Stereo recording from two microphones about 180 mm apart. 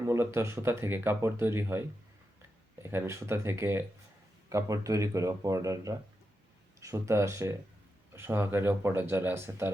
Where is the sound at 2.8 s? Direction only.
15° right (ahead or behind).